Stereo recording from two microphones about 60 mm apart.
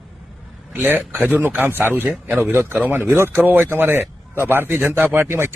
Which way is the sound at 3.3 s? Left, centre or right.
Right.